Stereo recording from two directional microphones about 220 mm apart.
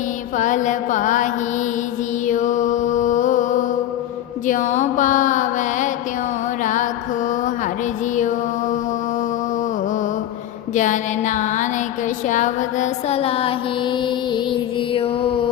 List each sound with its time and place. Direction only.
0.3 s mantra: 35° left (ahead or behind)
2.2 s music: 35° left (ahead or behind)
4.4 s mantra: 35° left (ahead or behind)
6.6 s music: 35° left (ahead or behind)
10.8 s music: 35° left (ahead or behind)